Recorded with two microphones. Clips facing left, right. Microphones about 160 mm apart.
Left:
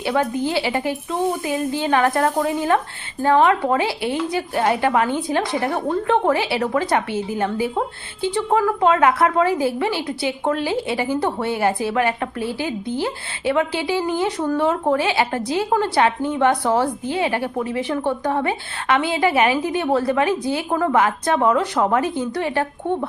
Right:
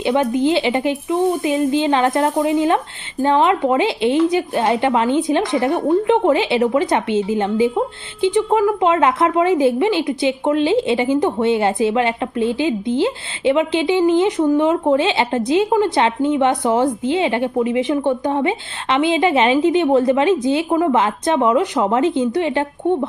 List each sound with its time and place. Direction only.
0.0 s a woman's voice: 20° right (ahead or behind)